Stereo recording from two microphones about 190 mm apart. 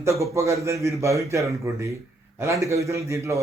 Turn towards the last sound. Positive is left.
turn(degrees=-15)  # may be behind; listen again after turning